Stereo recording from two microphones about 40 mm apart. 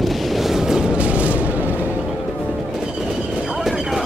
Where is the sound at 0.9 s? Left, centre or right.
Right.